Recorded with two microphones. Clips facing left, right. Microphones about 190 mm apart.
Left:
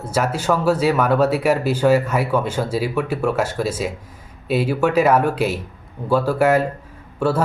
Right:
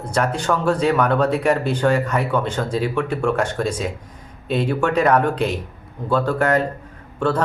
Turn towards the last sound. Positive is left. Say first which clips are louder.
# left 1 dB
turn(degrees=10)  # may be behind; listen again after turning